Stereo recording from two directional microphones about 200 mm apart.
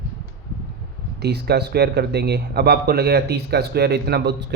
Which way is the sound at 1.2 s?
55° right (ahead or behind).